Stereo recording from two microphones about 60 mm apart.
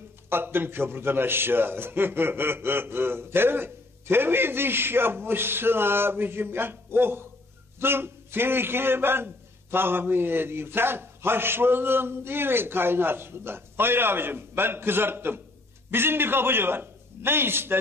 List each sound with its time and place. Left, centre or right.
0.3 s a man's voice: right